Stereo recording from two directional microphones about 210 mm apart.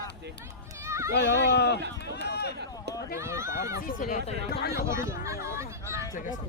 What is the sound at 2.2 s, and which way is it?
Run, 50° left (ahead or behind).